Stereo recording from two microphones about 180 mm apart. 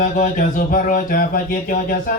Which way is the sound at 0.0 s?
45° left (ahead or behind).